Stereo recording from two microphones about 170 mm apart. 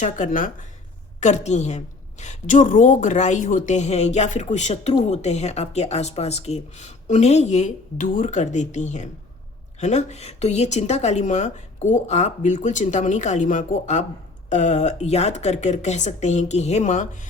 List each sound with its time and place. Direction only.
0.0 s a woman's voice: 50° left (ahead or behind)